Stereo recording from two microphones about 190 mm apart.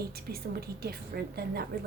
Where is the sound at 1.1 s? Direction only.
55° right (ahead or behind).